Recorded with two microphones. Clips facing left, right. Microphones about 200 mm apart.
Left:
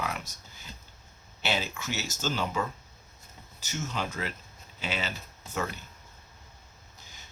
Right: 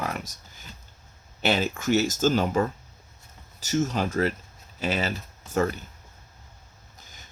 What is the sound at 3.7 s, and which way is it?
Speech, 45° right (ahead or behind).